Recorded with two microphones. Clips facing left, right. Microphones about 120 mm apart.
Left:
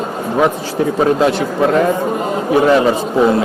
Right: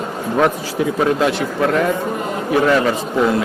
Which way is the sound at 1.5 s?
20° left (ahead or behind).